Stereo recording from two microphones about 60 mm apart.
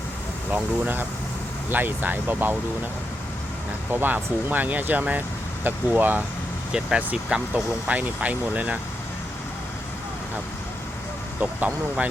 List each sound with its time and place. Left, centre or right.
0.5 s speech: right
4.0 s speech: right
7.3 s speech: centre
7.9 s speech: right
11.3 s speech: right